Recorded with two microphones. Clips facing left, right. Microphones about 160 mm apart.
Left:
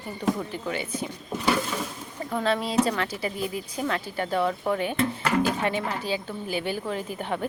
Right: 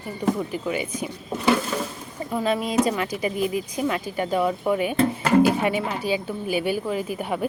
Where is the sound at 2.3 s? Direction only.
10° right (ahead or behind).